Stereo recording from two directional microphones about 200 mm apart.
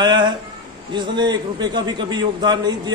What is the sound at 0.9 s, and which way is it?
A man's voice, 25° right (ahead or behind).